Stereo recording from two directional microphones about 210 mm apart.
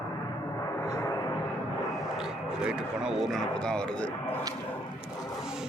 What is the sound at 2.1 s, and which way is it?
Speech, 5° right (ahead or behind).